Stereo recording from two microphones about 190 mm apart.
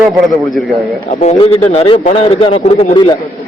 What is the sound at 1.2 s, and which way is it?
A man's voice, 35° left (ahead or behind).